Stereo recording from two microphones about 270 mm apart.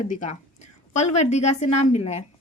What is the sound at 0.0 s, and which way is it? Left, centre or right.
A woman's voice, left.